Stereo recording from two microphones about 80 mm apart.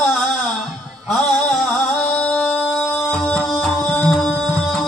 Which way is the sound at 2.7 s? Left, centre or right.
Centre.